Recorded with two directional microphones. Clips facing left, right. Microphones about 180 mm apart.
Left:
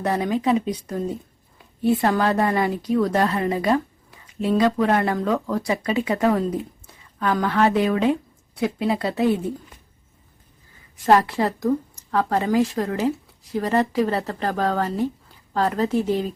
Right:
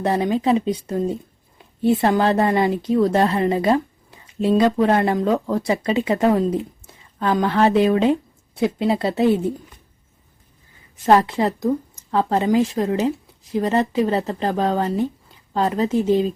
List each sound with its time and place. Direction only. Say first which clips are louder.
0.0 s a woman's voice: right 2 dB; 30° right (ahead or behind)
11.0 s a woman's voice: right 2 dB; 20° right (ahead or behind)